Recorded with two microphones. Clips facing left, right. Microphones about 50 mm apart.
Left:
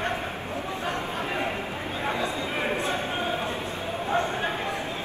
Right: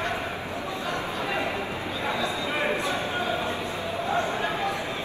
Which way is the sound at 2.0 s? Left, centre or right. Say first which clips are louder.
Even; left.